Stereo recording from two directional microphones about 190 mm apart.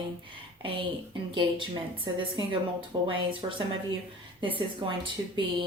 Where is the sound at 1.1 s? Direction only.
25° right (ahead or behind).